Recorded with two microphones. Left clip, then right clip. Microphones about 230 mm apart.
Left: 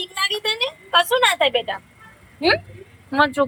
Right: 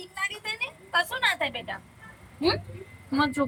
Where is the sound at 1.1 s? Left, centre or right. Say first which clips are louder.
Left 9 dB; left.